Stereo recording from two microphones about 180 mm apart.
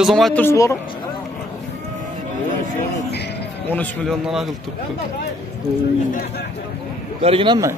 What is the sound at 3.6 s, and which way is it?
Speech, 10° left (ahead or behind).